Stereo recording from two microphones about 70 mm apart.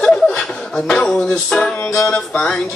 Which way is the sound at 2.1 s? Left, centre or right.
Centre.